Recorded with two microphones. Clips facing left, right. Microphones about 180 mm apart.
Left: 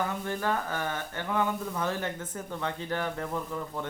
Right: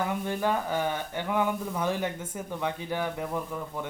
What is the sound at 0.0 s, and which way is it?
Speech, 15° right (ahead or behind).